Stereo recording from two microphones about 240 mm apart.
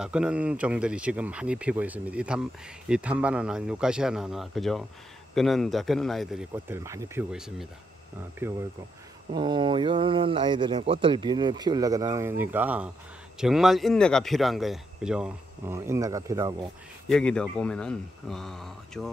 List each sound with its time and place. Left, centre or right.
0.0 s speech: centre
9.3 s speech: centre
17.1 s speech: centre